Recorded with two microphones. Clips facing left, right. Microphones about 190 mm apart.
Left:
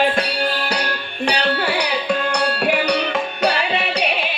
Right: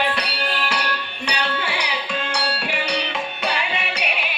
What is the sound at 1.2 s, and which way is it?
Music, 55° left (ahead or behind).